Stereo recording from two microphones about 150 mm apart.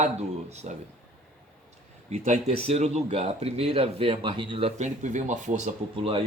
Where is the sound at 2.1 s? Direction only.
50° right (ahead or behind).